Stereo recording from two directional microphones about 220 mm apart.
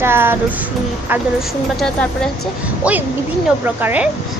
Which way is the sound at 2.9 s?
5° right (ahead or behind).